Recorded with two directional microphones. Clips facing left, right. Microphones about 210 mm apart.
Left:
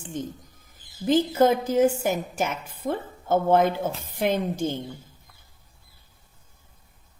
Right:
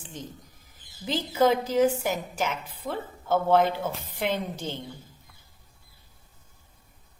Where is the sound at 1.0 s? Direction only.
50° left (ahead or behind).